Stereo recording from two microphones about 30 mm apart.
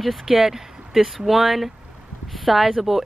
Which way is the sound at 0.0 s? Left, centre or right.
Centre.